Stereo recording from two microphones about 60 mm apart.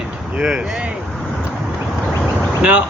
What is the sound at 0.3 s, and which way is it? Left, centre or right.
Speech, centre.